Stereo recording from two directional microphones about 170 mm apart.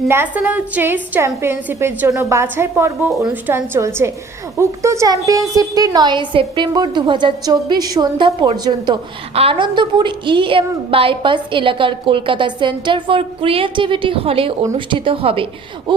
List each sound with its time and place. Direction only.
0.1 s a woman's voice: 10° right (ahead or behind)
9.3 s a woman's voice: 35° right (ahead or behind)